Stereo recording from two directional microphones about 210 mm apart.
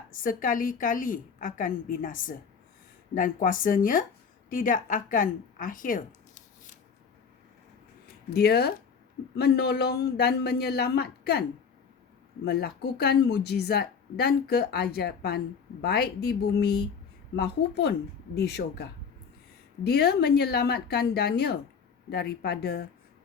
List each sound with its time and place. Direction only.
0.1 s a woman's voice: 40° left (ahead or behind)
8.3 s speech: 50° left (ahead or behind)
12.5 s speech: 50° left (ahead or behind)